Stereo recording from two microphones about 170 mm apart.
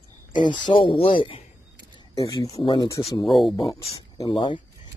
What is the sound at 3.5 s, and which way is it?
Speech, 20° left (ahead or behind).